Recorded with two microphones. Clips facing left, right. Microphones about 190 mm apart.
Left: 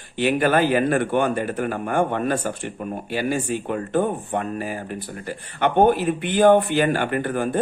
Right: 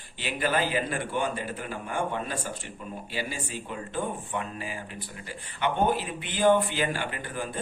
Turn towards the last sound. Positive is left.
turn(degrees=55)  # may be behind; listen again after turning